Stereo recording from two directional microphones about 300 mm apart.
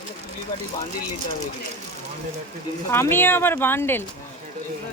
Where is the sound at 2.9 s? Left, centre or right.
Centre.